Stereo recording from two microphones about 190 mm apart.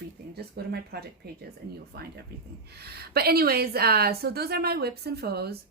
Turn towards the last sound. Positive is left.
turn(degrees=-55)  # may be behind; listen again after turning